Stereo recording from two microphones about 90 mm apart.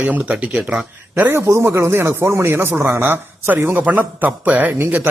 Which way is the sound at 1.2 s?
25° right (ahead or behind).